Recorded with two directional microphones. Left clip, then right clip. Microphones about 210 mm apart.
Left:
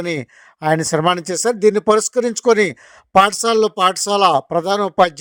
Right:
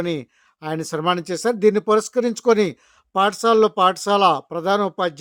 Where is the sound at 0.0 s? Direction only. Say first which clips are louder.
Left 2 dB; 25° left (ahead or behind).